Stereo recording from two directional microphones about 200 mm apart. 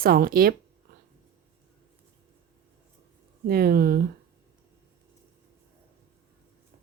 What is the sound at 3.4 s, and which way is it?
Speech, 50° right (ahead or behind).